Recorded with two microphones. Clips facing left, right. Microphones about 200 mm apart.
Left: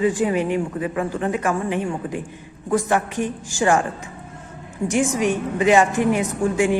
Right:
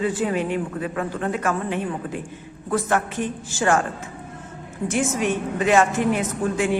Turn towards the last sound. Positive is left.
turn(degrees=15)  # may be behind; listen again after turning